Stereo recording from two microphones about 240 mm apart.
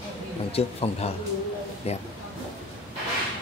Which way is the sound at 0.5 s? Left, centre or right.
Left.